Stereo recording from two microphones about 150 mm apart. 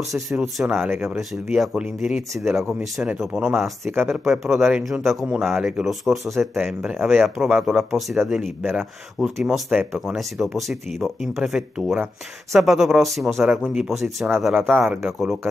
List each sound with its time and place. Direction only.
0.3 s speech: centre (ahead or behind)
0.8 s speech: 15° right (ahead or behind)
1.6 s speech: centre (ahead or behind)
3.8 s speech: 15° right (ahead or behind)
4.3 s speech: centre (ahead or behind)
7.2 s speech: centre (ahead or behind)
14.8 s speech: 15° right (ahead or behind)
15.0 s speech: centre (ahead or behind)